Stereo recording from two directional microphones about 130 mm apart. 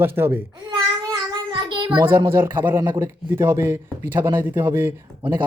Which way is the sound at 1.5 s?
35° right (ahead or behind).